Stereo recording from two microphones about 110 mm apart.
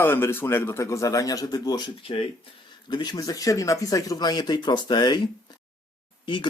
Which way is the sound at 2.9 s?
40° left (ahead or behind).